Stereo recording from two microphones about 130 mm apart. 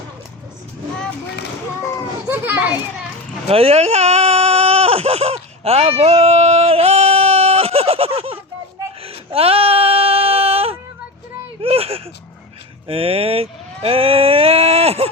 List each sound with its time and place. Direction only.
2.3 s a child's voice: 15° right (ahead or behind)
3.5 s speech: 50° right (ahead or behind)
9.0 s a sound: 50° right (ahead or behind)
11.6 s speech: 50° right (ahead or behind)